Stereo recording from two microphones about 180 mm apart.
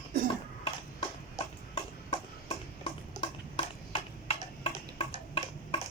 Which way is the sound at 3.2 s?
30° left (ahead or behind).